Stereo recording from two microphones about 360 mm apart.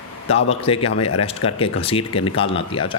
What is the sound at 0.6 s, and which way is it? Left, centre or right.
Speech, centre.